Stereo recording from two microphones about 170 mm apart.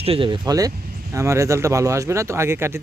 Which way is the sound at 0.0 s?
35° right (ahead or behind).